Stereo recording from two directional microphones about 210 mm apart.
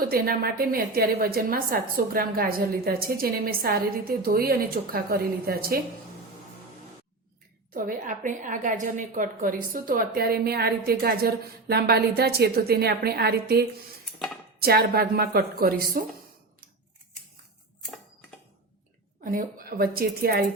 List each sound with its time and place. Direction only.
0.1 s a woman's voice: 45° right (ahead or behind)
7.7 s a woman's voice: 40° right (ahead or behind)
19.2 s a woman's voice: 40° right (ahead or behind)